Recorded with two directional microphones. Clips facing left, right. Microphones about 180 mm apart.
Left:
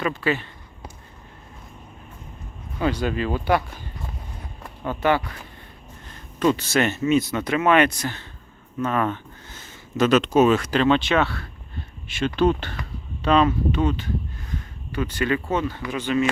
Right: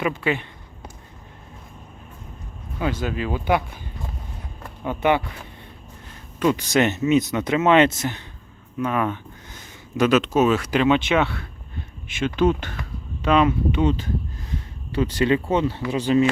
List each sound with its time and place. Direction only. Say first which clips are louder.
0.2 s speech: even; 15° right (ahead or behind)
3.0 s speech: left 2 dB; 5° right (ahead or behind)
4.8 s speech: right 1 dB; 15° right (ahead or behind)
6.4 s speech: right 1 dB; 10° right (ahead or behind)
8.8 s speech: even; 10° right (ahead or behind)
12.2 s speech: even; 10° right (ahead or behind)
14.9 s speech: right 4 dB; 30° right (ahead or behind)